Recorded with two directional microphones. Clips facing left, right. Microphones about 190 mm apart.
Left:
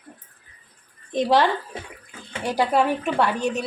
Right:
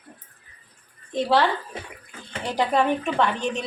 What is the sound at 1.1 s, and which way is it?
Speech, 15° left (ahead or behind).